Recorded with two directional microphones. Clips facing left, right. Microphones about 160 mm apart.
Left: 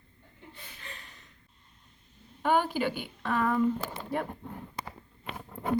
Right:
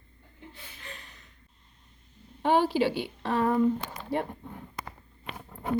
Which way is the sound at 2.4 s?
30° right (ahead or behind).